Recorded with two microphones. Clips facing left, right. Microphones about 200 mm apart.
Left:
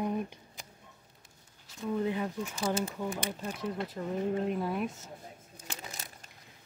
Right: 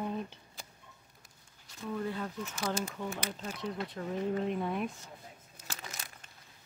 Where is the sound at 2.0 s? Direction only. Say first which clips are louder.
Left 4 dB; 15° left (ahead or behind).